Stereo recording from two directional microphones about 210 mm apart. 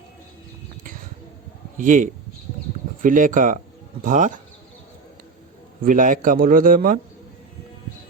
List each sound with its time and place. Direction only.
1.8 s a man's voice: 40° right (ahead or behind)
5.8 s a man's voice: 40° right (ahead or behind)